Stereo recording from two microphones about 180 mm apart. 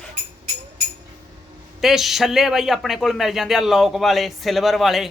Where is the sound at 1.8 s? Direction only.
Centre (ahead or behind).